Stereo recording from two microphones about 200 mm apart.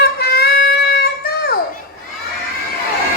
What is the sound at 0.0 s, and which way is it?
Music, 50° left (ahead or behind).